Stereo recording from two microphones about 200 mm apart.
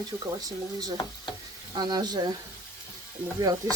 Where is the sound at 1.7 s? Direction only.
20° right (ahead or behind).